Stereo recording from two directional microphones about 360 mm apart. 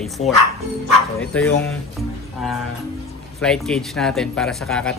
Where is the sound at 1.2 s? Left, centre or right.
Centre.